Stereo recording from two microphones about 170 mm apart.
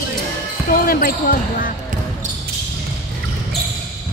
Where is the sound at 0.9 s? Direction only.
55° left (ahead or behind).